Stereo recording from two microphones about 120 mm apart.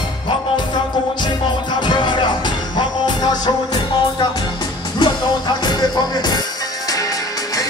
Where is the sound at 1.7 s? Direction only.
40° left (ahead or behind).